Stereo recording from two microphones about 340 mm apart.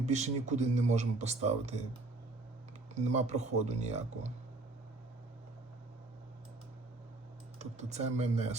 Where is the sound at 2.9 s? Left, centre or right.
Centre.